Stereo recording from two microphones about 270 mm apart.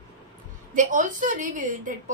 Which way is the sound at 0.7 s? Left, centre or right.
Right.